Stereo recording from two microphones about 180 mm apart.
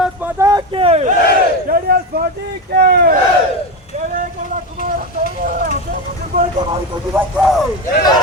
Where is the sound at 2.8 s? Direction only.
55° right (ahead or behind).